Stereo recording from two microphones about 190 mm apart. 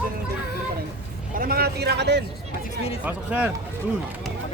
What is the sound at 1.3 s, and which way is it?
Speech, 50° right (ahead or behind).